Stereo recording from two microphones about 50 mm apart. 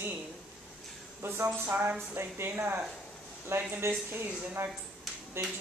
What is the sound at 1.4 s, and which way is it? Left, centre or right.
Speech, right.